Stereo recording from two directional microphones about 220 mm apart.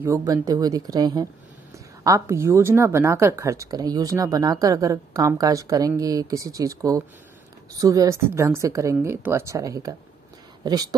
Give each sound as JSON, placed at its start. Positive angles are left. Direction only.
{"t": 0.0, "sound": "speech", "side_deg": -15}